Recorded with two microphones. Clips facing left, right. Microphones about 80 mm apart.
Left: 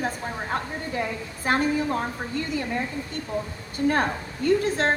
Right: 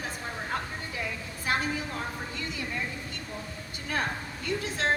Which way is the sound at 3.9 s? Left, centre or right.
Left.